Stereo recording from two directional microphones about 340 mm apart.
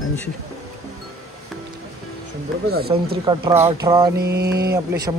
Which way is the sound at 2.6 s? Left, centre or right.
Right.